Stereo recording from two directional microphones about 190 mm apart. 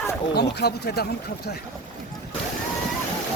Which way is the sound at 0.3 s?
55° left (ahead or behind).